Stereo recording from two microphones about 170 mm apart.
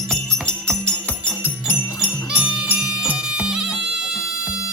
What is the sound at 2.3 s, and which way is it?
Music, 10° right (ahead or behind).